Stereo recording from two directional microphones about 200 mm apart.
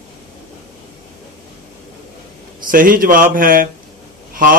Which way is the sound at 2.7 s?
45° right (ahead or behind).